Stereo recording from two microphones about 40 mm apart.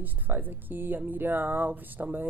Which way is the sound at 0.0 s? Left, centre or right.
Right.